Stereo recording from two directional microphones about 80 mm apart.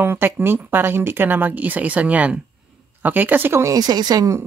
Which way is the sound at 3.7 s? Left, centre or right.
Right.